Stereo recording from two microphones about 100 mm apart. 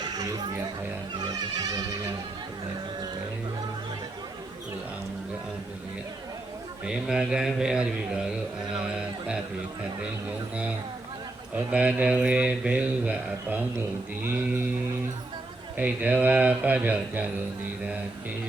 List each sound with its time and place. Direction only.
0.0 s a sound: 40° right (ahead or behind)
1.2 s music: 40° right (ahead or behind)
6.8 s speech: 5° right (ahead or behind)
14.2 s sheep: 20° right (ahead or behind)
15.8 s speech: 15° right (ahead or behind)